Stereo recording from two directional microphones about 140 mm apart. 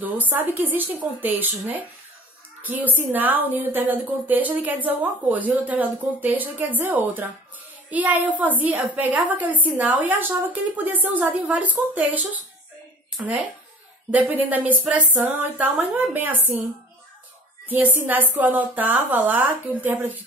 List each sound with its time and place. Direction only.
0.0 s a woman's voice: 10° right (ahead or behind)
2.6 s a woman's voice: 10° right (ahead or behind)
17.6 s a woman's voice: 10° right (ahead or behind)